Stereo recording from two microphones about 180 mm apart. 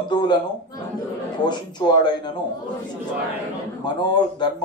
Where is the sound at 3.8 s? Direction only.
25° left (ahead or behind).